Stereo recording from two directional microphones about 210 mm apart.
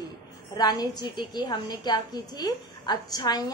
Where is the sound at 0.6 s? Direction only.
20° left (ahead or behind).